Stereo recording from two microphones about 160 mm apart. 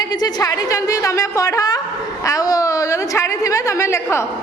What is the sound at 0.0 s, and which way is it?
A woman's voice, 25° left (ahead or behind).